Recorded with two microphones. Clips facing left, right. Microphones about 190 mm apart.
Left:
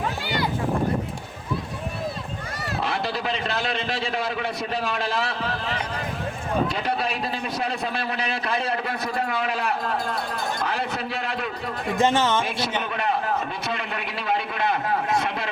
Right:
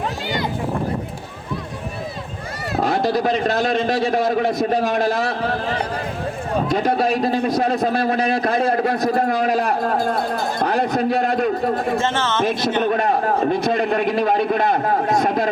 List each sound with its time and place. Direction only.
2.7 s a man's voice: 40° right (ahead or behind)
11.9 s speech: 15° left (ahead or behind)
12.6 s a man's voice: 45° right (ahead or behind)